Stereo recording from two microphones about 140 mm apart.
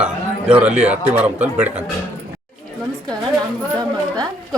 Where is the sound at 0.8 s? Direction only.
50° right (ahead or behind).